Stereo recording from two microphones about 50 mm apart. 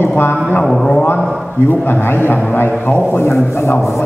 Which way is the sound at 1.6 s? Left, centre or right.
Left.